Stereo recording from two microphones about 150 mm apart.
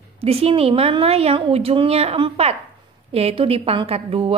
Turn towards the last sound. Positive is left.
turn(degrees=-40)  # may be behind; listen again after turning